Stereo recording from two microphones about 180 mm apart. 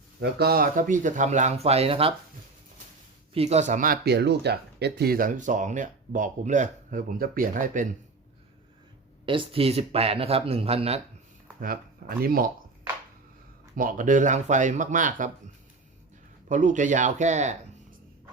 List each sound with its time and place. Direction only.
0.2 s speech: 60° right (ahead or behind); by 2.1 s 30° right (ahead or behind)
3.3 s speech: 35° right (ahead or behind)
4.0 s speech: 70° right (ahead or behind); by 7.9 s 45° right (ahead or behind)
9.2 s speech: 30° right (ahead or behind)
11.6 s speech: 55° right (ahead or behind)
13.7 s speech: 50° right (ahead or behind)
16.5 s speech: 45° right (ahead or behind)